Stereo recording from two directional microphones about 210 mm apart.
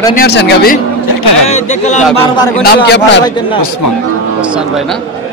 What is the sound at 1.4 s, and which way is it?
Speech, 35° left (ahead or behind).